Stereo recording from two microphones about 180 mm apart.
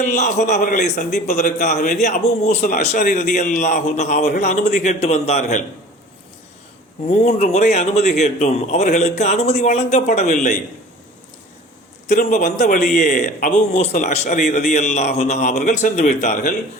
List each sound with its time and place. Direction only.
0.0 s a man's voice: 40° left (ahead or behind)
7.1 s a man's voice: 35° left (ahead or behind)
12.0 s a man's voice: 40° left (ahead or behind)